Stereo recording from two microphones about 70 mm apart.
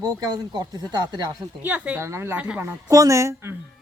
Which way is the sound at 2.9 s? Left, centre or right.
Right.